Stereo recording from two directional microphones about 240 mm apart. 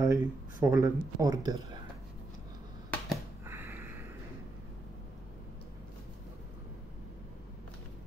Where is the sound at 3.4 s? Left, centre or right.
Centre.